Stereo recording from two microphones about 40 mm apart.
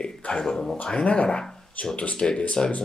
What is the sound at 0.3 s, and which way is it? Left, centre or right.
Speech, centre.